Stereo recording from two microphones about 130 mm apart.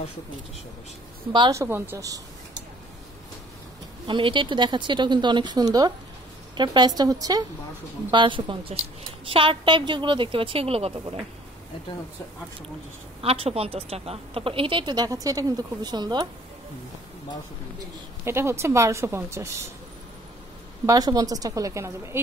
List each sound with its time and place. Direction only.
1.5 s a woman's voice: 20° right (ahead or behind)
4.1 s speech: 40° right (ahead or behind)
8.1 s a woman's voice: 40° right (ahead or behind)
13.2 s a woman's voice: 50° right (ahead or behind); by 16.3 s 35° right (ahead or behind)
18.2 s a woman's voice: 20° right (ahead or behind)
20.8 s a woman's voice: 30° right (ahead or behind)